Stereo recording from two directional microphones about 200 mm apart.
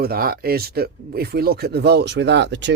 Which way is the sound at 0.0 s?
50° right (ahead or behind).